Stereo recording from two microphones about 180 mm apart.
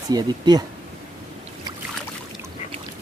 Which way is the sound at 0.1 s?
20° right (ahead or behind).